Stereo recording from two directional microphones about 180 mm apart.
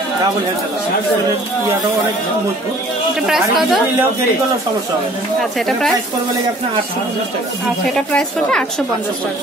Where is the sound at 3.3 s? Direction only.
Centre (ahead or behind).